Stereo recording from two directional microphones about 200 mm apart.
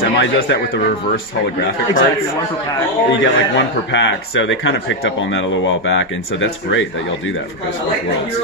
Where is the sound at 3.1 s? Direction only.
65° left (ahead or behind).